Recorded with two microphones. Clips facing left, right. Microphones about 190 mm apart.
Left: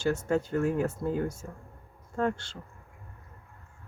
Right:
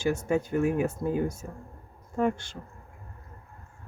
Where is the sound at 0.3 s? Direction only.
15° right (ahead or behind).